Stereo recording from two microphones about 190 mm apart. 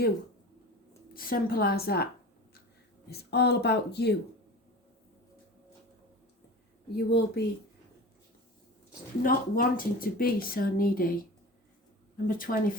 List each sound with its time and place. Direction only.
1.1 s speech: 50° left (ahead or behind)
3.1 s speech: 60° left (ahead or behind)
6.9 s speech: 60° left (ahead or behind)
9.2 s speech: 50° left (ahead or behind)
12.1 s speech: 50° left (ahead or behind)